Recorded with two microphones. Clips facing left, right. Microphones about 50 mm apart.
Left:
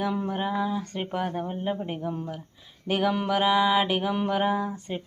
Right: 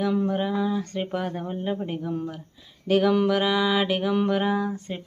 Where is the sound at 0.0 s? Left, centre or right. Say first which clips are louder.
Right 3 dB; centre.